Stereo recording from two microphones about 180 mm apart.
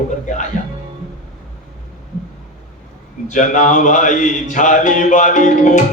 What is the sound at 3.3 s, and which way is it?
A man's voice, 45° left (ahead or behind).